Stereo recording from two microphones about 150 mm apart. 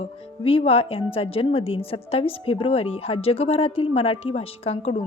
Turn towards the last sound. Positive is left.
turn(degrees=40)  # may be behind; listen again after turning